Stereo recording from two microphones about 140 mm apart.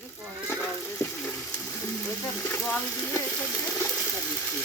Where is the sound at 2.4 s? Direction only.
15° left (ahead or behind).